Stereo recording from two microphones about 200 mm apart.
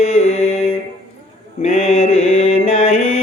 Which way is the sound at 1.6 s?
30° left (ahead or behind).